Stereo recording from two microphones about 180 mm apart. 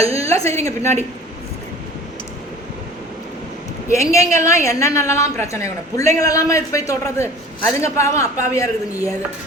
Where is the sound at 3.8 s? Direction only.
15° left (ahead or behind).